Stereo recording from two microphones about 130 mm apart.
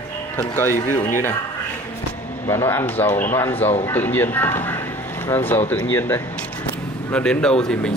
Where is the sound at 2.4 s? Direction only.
20° left (ahead or behind).